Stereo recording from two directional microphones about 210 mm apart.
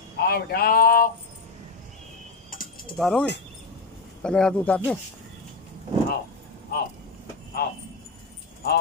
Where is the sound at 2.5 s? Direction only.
40° left (ahead or behind).